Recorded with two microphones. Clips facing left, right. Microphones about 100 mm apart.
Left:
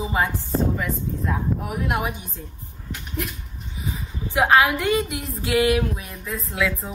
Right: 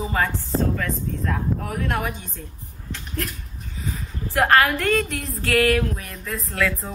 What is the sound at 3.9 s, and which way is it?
A woman's voice, centre (ahead or behind).